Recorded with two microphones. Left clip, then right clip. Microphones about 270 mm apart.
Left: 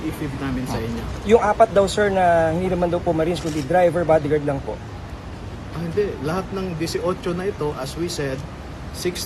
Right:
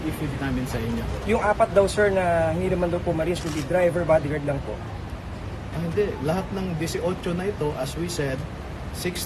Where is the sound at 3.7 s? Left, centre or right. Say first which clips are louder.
Left 4 dB; left.